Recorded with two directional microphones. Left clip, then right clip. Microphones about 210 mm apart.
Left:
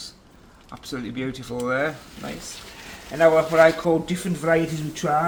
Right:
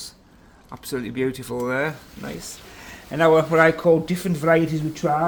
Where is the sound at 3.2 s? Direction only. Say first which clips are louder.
Even; 50° right (ahead or behind).